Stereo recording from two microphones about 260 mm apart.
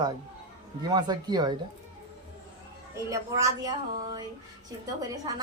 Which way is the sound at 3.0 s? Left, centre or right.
Centre.